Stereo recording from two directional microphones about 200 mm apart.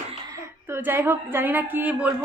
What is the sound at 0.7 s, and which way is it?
A woman's voice, 10° right (ahead or behind).